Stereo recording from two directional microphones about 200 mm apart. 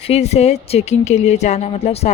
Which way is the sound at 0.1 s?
30° left (ahead or behind).